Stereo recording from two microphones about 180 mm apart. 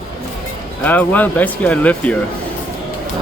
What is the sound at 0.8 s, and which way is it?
Speech, 10° left (ahead or behind).